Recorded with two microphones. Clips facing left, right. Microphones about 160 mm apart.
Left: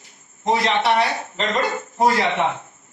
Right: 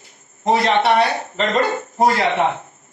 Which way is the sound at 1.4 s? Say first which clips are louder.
Right 4 dB; 40° right (ahead or behind).